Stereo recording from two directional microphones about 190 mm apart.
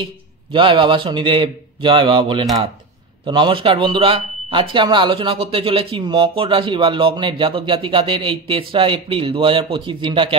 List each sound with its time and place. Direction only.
0.0 s speech: 25° right (ahead or behind)